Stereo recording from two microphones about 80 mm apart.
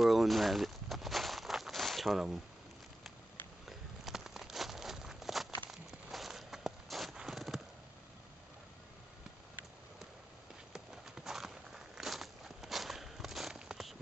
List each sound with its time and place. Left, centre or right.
0.0 s walk: centre
3.6 s walk: centre
10.7 s walk: centre